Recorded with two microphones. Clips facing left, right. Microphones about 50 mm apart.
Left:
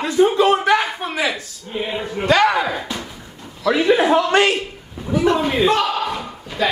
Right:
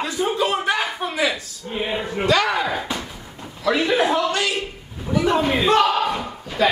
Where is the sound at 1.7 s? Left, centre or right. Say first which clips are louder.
Even; centre.